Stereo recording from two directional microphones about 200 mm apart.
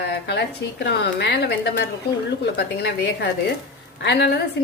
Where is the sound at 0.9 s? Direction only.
60° left (ahead or behind).